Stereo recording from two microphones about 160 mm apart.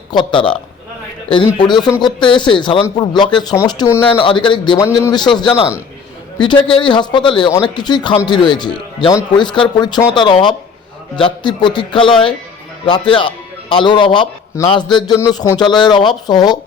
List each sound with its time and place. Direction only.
0.1 s a man's voice: 30° left (ahead or behind)